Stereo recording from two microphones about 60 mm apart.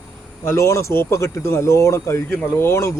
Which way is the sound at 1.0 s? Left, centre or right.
Left.